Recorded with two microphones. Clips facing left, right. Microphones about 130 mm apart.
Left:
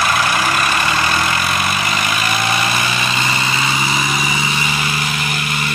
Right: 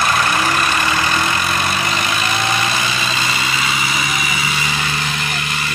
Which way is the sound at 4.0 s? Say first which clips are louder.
Left 2 dB; 30° left (ahead or behind).